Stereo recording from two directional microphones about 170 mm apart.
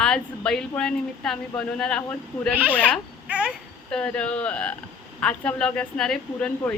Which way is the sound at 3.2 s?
10° right (ahead or behind).